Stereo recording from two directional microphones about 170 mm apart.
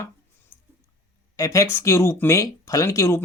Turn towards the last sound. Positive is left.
turn(degrees=15)  # may be behind; listen again after turning